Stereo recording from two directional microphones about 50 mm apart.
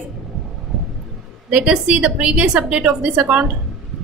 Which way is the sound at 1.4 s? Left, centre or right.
Right.